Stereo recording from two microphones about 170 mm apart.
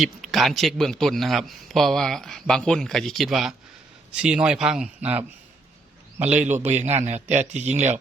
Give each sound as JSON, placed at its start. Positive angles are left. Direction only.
{"t": 0.0, "sound": "a man's voice", "side_deg": 0}
{"t": 6.6, "sound": "a man's voice", "side_deg": -40}